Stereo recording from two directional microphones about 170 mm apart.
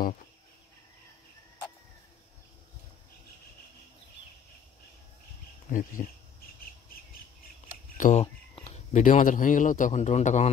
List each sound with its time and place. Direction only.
5.7 s speech: 55° left (ahead or behind)
8.0 s speech: 40° left (ahead or behind)